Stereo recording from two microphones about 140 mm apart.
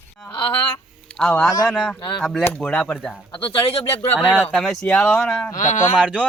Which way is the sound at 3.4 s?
40° left (ahead or behind).